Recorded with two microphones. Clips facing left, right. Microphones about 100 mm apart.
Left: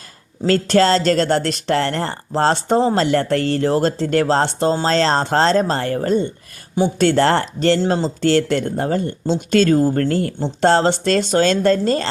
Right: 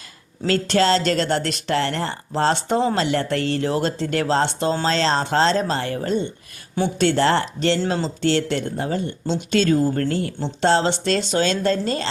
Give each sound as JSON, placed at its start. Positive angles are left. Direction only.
{"t": 0.4, "sound": "speech", "side_deg": 40}